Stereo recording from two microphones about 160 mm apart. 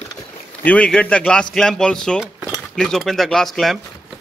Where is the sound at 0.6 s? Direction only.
10° left (ahead or behind).